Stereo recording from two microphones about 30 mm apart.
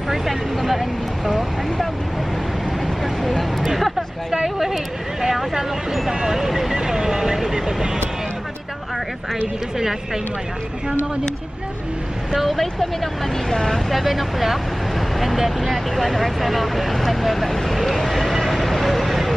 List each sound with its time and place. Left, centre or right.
0.1 s a sound: centre
0.6 s speech: centre
3.0 s speech: centre
5.3 s speech: centre
6.8 s vehicle: centre
12.4 s speech: centre
13.0 s speech: centre
13.8 s speech: centre
18.4 s vehicle: centre